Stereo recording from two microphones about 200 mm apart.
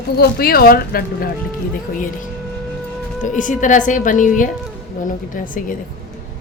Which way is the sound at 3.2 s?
40° left (ahead or behind).